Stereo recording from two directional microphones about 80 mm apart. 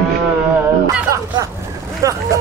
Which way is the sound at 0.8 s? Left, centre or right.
Right.